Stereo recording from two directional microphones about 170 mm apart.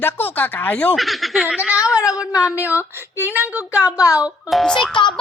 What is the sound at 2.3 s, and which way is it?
Speech, 15° left (ahead or behind).